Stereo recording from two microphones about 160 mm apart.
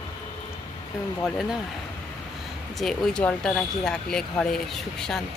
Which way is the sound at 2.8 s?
Centre (ahead or behind).